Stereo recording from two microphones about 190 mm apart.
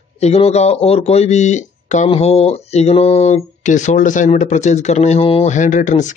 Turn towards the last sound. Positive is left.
turn(degrees=40)  # may be behind; listen again after turning